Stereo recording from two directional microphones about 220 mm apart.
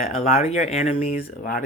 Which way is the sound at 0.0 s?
35° left (ahead or behind).